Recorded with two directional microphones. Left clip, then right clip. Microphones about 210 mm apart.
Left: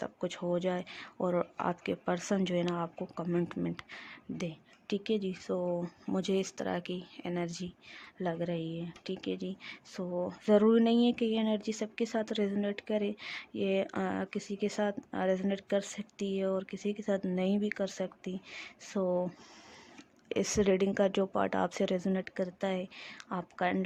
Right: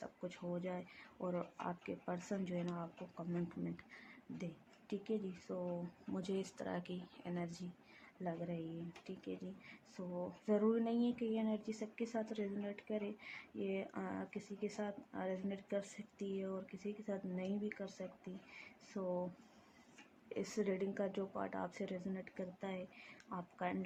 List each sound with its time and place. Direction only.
0.0 s speech: 50° left (ahead or behind)
20.3 s speech: 50° left (ahead or behind)